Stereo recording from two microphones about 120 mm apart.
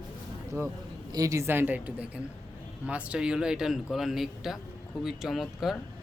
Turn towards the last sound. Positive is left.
turn(degrees=0)  # may be behind; listen again after turning